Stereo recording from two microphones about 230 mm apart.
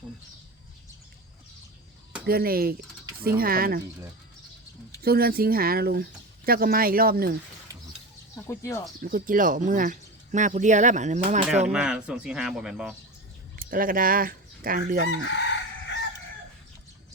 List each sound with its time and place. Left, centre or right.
2.2 s speech: right
5.0 s speech: right
8.4 s speech: centre
9.0 s speech: right
11.7 s speech: centre
13.6 s chicken: right